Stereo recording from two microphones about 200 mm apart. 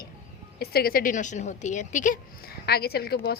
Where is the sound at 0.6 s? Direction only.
50° left (ahead or behind).